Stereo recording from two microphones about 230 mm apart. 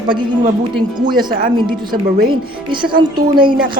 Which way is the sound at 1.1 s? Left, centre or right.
Right.